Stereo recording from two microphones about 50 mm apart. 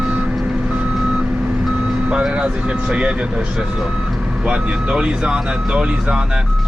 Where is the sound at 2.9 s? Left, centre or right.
Centre.